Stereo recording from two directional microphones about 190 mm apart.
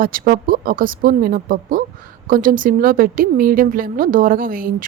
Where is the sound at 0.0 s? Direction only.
50° right (ahead or behind).